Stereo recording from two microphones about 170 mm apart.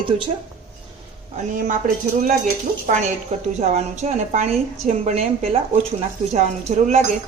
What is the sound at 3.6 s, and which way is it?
A woman's voice, 40° right (ahead or behind).